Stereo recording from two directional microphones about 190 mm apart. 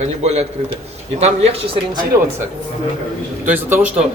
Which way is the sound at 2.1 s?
15° right (ahead or behind).